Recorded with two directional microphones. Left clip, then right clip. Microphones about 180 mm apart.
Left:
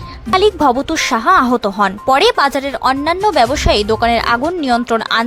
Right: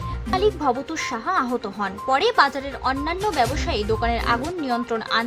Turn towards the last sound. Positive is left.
turn(degrees=35)  # may be behind; listen again after turning